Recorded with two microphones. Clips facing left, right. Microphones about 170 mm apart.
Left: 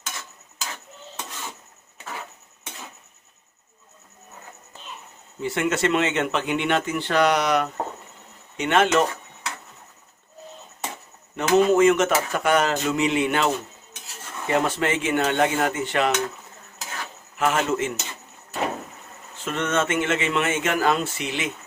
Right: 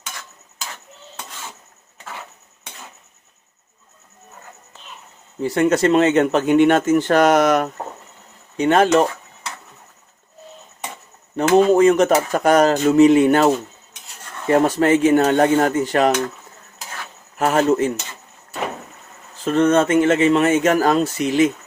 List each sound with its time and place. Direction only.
5.4 s speech: 40° right (ahead or behind)
8.5 s speech: 35° right (ahead or behind)
11.3 s speech: 35° right (ahead or behind)
17.3 s speech: 40° right (ahead or behind)
19.5 s speech: 35° right (ahead or behind)